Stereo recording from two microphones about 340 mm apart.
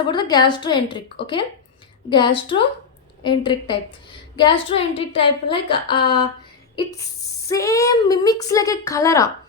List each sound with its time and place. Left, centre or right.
0.0 s a woman's voice: centre
2.0 s a woman's voice: centre
7.4 s a woman's voice: centre